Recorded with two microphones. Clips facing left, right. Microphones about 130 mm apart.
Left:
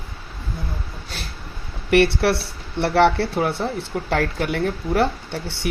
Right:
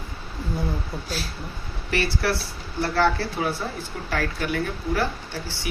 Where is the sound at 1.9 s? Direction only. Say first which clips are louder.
Left 8 dB; 65° left (ahead or behind).